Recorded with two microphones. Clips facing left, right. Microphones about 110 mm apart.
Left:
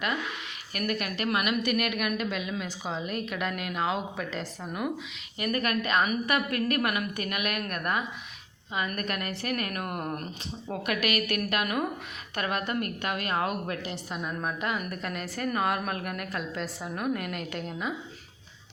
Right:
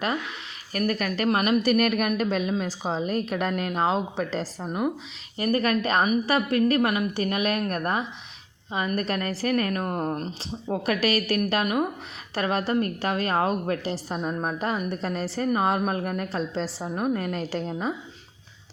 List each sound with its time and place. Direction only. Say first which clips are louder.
0.7 s a woman's voice: right 5 dB; 35° right (ahead or behind)